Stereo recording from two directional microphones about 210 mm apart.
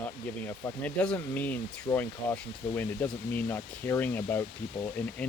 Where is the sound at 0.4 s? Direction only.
10° left (ahead or behind).